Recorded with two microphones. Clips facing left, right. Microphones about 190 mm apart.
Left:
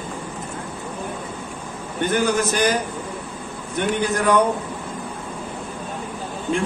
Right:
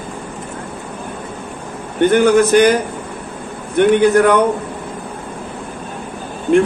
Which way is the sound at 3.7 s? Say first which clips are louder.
Right 11 dB; 60° right (ahead or behind).